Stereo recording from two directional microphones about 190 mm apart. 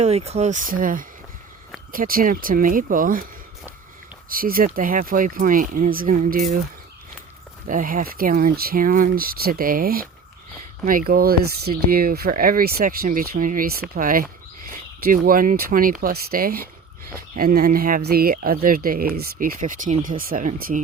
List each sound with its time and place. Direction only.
0.0 s speech: 35° right (ahead or behind)
4.3 s speech: 50° right (ahead or behind)
7.7 s speech: 45° right (ahead or behind)